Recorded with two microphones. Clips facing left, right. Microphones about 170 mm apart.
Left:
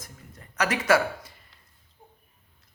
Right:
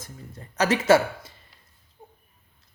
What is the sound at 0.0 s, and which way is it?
Speech, 30° right (ahead or behind).